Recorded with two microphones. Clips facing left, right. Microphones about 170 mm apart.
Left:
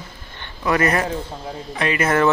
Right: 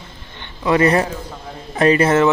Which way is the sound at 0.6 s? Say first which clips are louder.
Right 4 dB; 25° right (ahead or behind).